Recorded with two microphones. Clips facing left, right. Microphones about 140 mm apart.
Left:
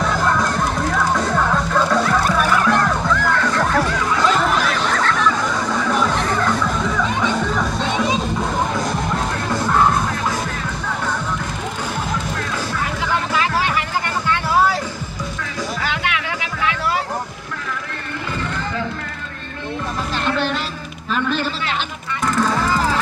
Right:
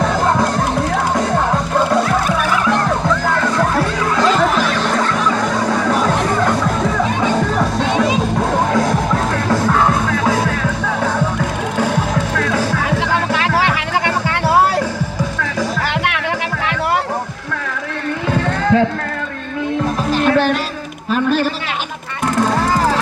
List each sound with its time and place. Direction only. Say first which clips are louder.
0.0 s music: right 3 dB; 45° right (ahead or behind)
1.4 s music: right 2 dB; 30° right (ahead or behind)
5.6 s music: right 3 dB; 55° right (ahead or behind)
7.8 s music: right 5 dB; 65° right (ahead or behind); by 9.0 s 85° right
10.1 s music: right 7 dB; 80° right
11.8 s music: right 8 dB; 75° right (ahead or behind)
15.4 s music: right 5 dB; 60° right (ahead or behind)
18.3 s run: right 12 dB; 80° right
21.1 s a sound: right 5 dB; 45° right (ahead or behind)
22.4 s music: right 4 dB; 50° right (ahead or behind)